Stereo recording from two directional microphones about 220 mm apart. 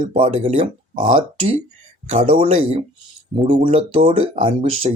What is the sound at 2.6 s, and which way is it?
Speech, 25° right (ahead or behind).